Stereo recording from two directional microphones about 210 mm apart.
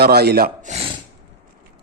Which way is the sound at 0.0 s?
50° right (ahead or behind).